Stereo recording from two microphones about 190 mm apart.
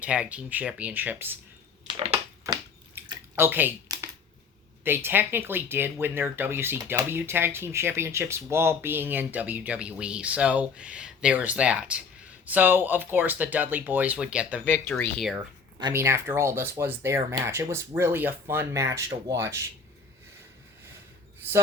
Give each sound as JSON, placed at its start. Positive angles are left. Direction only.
{"t": 0.0, "sound": "speech", "side_deg": -5}
{"t": 1.9, "sound": "a sound", "side_deg": -30}
{"t": 2.4, "sound": "a sound", "side_deg": -20}
{"t": 4.8, "sound": "speech", "side_deg": -10}
{"t": 14.6, "sound": "speech", "side_deg": 10}
{"t": 15.8, "sound": "speech", "side_deg": -15}